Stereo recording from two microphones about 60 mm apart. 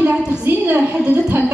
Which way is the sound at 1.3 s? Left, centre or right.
Right.